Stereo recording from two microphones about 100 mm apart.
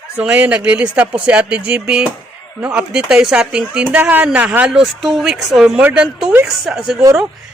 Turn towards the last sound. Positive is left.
turn(degrees=-5)  # may be behind; listen again after turning